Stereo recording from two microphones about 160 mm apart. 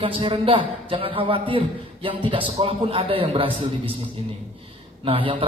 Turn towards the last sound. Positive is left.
turn(degrees=-35)  # may be behind; listen again after turning